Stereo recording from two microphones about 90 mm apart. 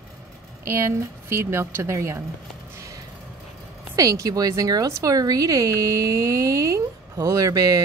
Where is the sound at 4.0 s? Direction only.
40° right (ahead or behind).